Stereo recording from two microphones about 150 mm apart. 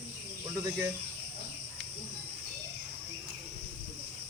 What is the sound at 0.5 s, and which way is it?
Speech, 25° right (ahead or behind).